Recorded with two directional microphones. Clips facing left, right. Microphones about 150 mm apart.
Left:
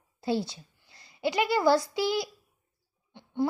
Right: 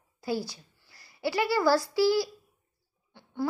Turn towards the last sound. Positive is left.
turn(degrees=20)  # may be behind; listen again after turning